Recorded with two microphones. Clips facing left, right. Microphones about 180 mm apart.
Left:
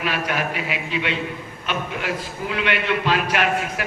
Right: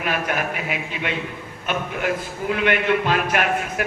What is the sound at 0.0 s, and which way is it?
A man's voice, 50° right (ahead or behind).